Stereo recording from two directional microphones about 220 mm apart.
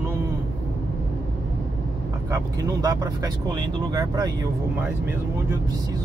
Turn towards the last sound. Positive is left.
turn(degrees=-15)  # may be behind; listen again after turning